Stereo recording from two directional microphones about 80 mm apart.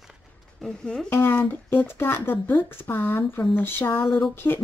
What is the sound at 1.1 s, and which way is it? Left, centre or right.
Speech, left.